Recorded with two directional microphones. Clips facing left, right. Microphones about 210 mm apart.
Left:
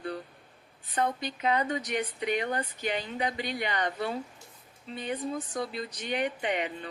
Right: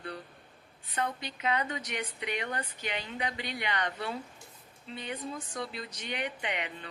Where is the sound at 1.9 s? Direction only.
45° left (ahead or behind).